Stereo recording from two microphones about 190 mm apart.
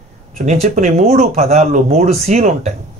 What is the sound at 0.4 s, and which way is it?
Speech, 40° right (ahead or behind).